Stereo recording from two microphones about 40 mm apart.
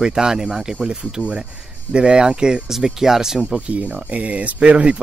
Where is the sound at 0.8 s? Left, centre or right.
Right.